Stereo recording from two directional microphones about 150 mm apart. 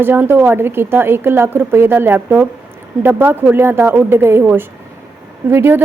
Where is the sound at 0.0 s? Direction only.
15° right (ahead or behind).